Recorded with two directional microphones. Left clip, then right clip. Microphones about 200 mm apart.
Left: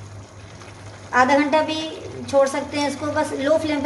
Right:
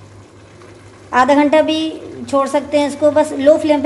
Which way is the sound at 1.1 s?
40° right (ahead or behind).